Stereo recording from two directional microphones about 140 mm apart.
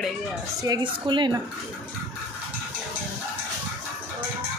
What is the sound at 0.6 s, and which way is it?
Speech, 30° right (ahead or behind).